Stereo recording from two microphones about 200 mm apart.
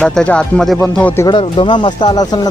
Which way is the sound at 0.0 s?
5° left (ahead or behind).